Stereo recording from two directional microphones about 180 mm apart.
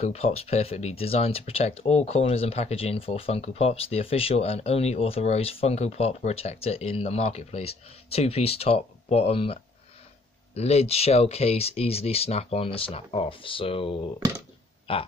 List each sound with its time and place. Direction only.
0.0 s speech: 35° left (ahead or behind)
14.9 s grunt: 30° left (ahead or behind)